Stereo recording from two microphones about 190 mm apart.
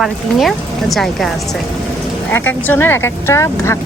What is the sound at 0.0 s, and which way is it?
Speech, centre (ahead or behind).